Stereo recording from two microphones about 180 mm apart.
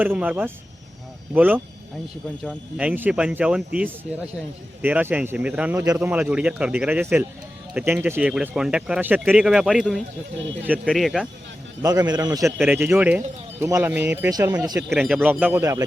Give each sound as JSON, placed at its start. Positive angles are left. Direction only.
{"t": 0.0, "sound": "speech", "side_deg": -10}
{"t": 4.8, "sound": "speech", "side_deg": -10}
{"t": 5.8, "sound": "a man's voice", "side_deg": -20}
{"t": 6.1, "sound": "speech", "side_deg": -10}
{"t": 11.8, "sound": "a man's voice", "side_deg": -20}
{"t": 12.5, "sound": "speech", "side_deg": -10}
{"t": 14.8, "sound": "speech", "side_deg": -5}